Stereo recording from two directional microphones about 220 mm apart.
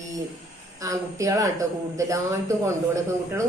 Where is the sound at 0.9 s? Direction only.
15° right (ahead or behind).